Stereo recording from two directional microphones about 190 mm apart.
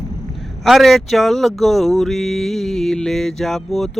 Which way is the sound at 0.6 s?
Centre (ahead or behind).